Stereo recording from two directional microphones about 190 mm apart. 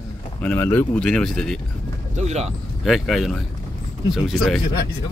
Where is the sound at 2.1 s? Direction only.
35° right (ahead or behind).